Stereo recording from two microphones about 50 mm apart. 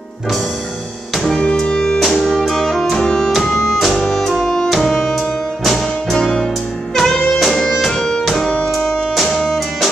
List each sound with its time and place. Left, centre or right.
1.3 s music: centre
2.0 s music: centre
3.4 s music: centre
7.0 s music: centre